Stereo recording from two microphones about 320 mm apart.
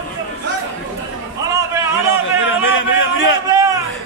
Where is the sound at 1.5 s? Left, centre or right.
Centre.